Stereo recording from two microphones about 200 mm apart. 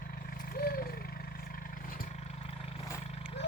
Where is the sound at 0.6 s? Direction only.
50° left (ahead or behind).